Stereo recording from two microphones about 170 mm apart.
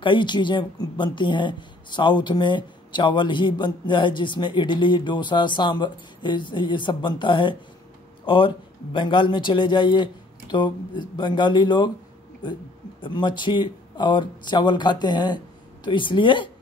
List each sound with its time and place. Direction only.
0.0 s speech: 30° left (ahead or behind)
13.0 s speech: 25° left (ahead or behind)